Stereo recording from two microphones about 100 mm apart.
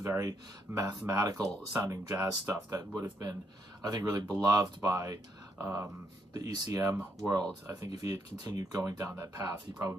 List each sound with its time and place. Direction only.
0.0 s speech: 30° right (ahead or behind)
6.3 s speech: 40° right (ahead or behind)